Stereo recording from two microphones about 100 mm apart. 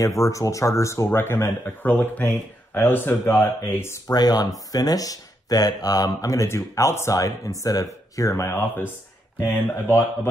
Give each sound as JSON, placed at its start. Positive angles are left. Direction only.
{"t": 0.0, "sound": "speech", "side_deg": 35}
{"t": 4.1, "sound": "speech", "side_deg": 40}